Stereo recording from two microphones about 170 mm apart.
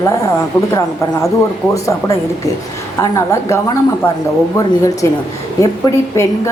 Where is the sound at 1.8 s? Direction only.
20° left (ahead or behind).